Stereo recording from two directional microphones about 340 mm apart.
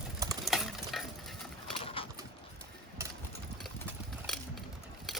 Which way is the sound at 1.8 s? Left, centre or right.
Centre.